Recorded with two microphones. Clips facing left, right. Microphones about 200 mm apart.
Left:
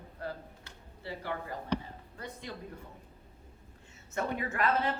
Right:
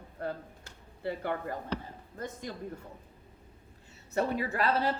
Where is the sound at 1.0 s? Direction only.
55° right (ahead or behind).